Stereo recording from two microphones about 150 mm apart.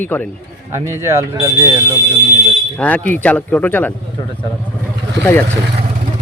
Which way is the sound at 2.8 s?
10° left (ahead or behind).